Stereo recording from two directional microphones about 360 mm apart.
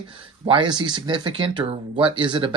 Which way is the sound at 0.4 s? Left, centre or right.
Centre.